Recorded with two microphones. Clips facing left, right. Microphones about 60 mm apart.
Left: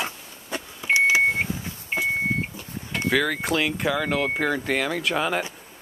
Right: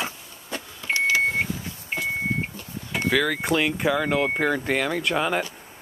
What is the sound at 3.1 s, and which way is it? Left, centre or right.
Speech, centre.